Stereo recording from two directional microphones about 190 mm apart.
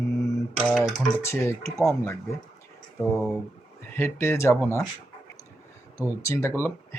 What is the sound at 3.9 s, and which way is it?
Speech, 10° left (ahead or behind).